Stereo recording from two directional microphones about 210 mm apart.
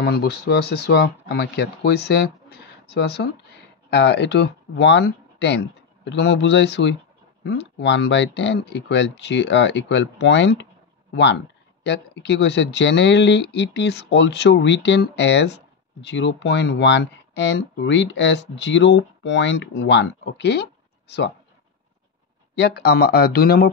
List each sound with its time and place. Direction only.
0.0 s speech: 50° left (ahead or behind)
11.8 s speech: 55° left (ahead or behind)
22.6 s speech: 50° left (ahead or behind)